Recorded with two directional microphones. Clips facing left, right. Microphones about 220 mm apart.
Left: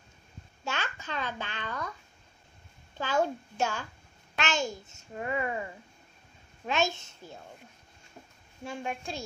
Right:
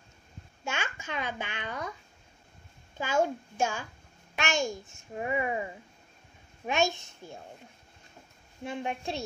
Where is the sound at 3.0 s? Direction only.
10° right (ahead or behind).